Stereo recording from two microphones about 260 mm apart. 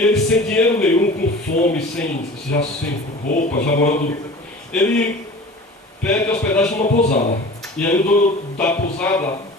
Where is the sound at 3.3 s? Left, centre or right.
Left.